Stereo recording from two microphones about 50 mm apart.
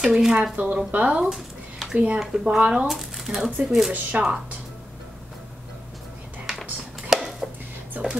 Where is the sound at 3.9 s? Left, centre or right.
Right.